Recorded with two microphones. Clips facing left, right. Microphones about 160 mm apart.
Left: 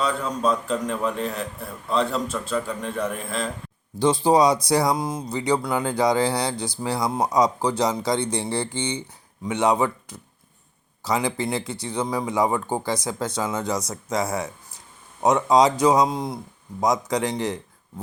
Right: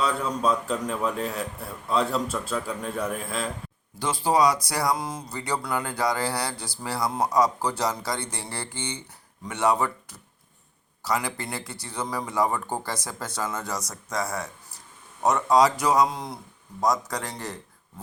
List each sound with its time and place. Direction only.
0.0 s a man's voice: 5° right (ahead or behind)
3.9 s a man's voice: 20° left (ahead or behind)